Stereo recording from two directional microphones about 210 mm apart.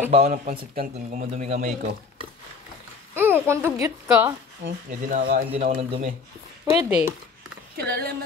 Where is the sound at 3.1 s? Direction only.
10° right (ahead or behind).